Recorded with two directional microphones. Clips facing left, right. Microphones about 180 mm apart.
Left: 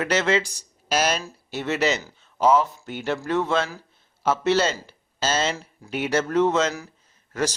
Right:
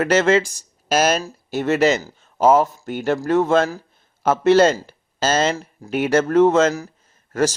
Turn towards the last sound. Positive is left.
turn(degrees=-45)  # may be behind; listen again after turning